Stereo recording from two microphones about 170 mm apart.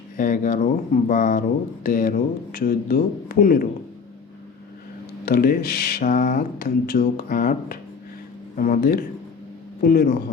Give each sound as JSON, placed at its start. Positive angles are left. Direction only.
{"t": 0.2, "sound": "speech", "side_deg": 55}
{"t": 5.2, "sound": "speech", "side_deg": 60}